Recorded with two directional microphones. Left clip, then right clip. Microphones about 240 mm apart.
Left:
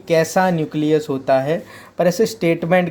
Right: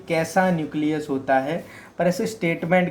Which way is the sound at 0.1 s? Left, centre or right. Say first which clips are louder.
Left 5 dB; left.